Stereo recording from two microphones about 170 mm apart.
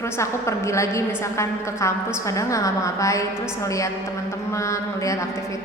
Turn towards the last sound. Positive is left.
turn(degrees=20)  # may be behind; listen again after turning